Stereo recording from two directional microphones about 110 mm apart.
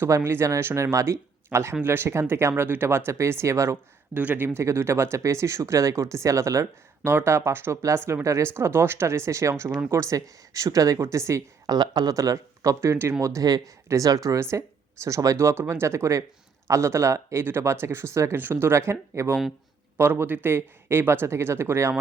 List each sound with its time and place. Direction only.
0.0 s speech: 20° right (ahead or behind)
4.1 s speech: 15° right (ahead or behind)